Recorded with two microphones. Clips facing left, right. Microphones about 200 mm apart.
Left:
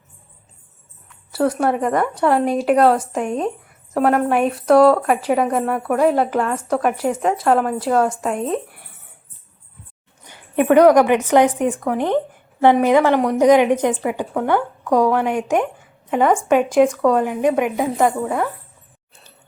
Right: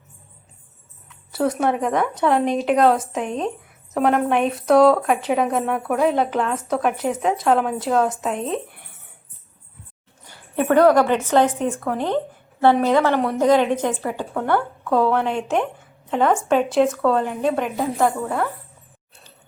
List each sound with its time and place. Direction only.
1.3 s a woman's voice: centre (ahead or behind)
10.2 s a woman's voice: 20° left (ahead or behind)